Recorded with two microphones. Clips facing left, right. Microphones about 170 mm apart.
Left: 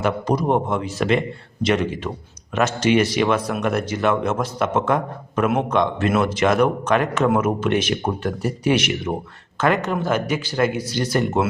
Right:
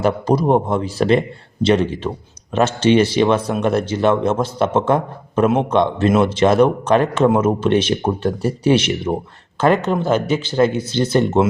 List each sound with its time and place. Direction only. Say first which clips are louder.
0.0 s a man's voice: right 4 dB; 35° right (ahead or behind)